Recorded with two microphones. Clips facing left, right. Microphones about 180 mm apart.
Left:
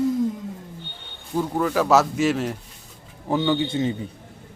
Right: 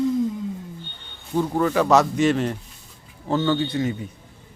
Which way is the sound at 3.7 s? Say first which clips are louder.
Left 1 dB; 25° left (ahead or behind).